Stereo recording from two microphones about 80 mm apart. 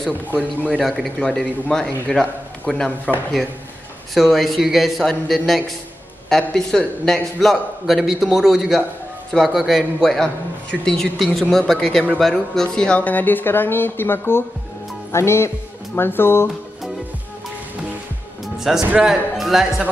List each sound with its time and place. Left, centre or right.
0.7 s a man's voice: centre
4.1 s a man's voice: centre; by 14.4 s left
15.1 s music: left
16.0 s speech: left
18.4 s music: centre
19.0 s a man's voice: centre